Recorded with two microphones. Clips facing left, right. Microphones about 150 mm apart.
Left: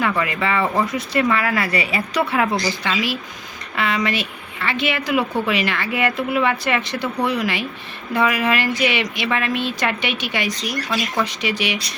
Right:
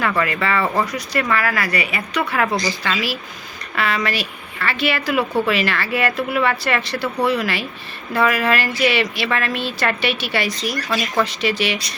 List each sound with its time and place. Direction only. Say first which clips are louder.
0.2 s speech: right 1 dB; 15° left (ahead or behind)
2.5 s speech: even; centre (ahead or behind)
2.8 s a woman's voice: left 1 dB; 20° left (ahead or behind)